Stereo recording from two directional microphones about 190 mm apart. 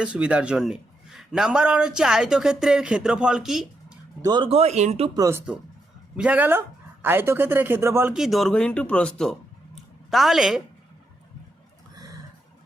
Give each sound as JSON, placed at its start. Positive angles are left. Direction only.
{"t": 0.0, "sound": "a man's voice", "side_deg": -5}
{"t": 4.2, "sound": "speech", "side_deg": -25}
{"t": 5.1, "sound": "speech", "side_deg": -15}
{"t": 6.1, "sound": "speech", "side_deg": -5}
{"t": 9.7, "sound": "a sound", "side_deg": 0}